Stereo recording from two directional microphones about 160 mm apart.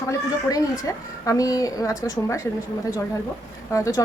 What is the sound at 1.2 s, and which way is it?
Speech, 20° left (ahead or behind).